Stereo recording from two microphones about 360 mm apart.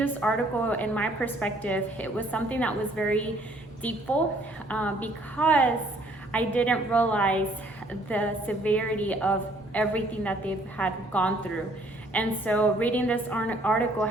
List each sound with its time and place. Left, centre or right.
0.0 s a woman's voice: centre